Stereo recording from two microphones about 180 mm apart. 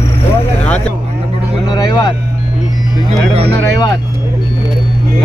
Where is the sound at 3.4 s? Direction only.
20° left (ahead or behind).